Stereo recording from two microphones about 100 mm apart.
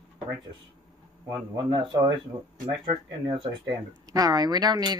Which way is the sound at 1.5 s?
50° right (ahead or behind).